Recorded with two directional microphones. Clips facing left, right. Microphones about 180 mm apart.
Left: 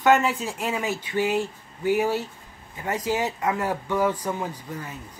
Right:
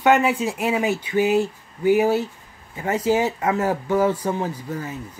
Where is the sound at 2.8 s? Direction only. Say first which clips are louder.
Right 6 dB; 25° right (ahead or behind).